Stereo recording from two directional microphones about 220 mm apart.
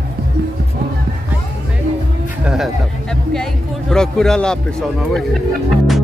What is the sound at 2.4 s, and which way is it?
Speech, centre (ahead or behind).